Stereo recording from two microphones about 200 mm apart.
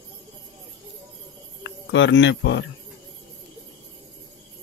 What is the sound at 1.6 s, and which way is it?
Speech, 65° left (ahead or behind).